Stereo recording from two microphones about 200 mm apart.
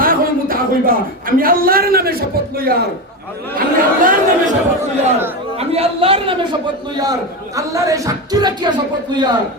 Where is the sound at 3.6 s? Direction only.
45° right (ahead or behind).